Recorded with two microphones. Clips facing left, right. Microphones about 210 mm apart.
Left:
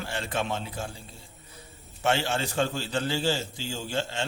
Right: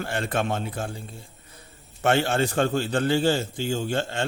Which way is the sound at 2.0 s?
55° right (ahead or behind).